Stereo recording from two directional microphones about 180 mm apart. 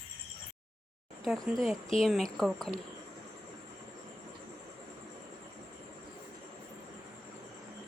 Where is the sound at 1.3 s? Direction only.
Centre (ahead or behind).